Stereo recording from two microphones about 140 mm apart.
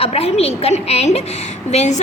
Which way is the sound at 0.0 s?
45° left (ahead or behind).